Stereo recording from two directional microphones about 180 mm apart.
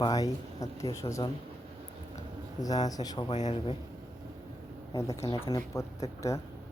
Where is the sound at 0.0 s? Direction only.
20° left (ahead or behind).